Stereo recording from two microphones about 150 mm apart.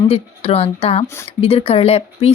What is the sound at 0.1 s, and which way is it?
Speech, 40° left (ahead or behind).